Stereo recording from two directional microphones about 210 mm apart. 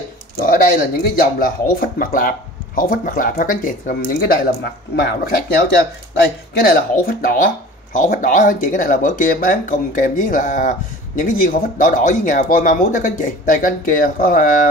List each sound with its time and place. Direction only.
0.5 s speech: 45° left (ahead or behind)
6.6 s speech: 45° left (ahead or behind)